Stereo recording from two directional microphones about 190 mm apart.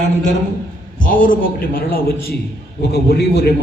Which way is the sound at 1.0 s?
45° left (ahead or behind).